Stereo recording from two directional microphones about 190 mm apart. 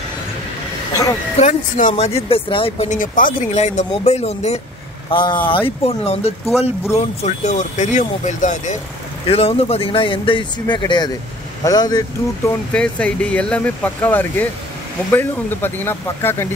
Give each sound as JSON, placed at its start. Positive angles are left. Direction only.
{"t": 1.4, "sound": "speech", "side_deg": 40}
{"t": 12.7, "sound": "speech", "side_deg": 5}